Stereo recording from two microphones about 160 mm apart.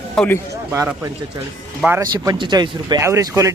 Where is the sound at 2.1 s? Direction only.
25° right (ahead or behind).